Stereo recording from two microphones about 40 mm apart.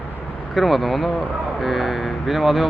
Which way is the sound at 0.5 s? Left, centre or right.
Centre.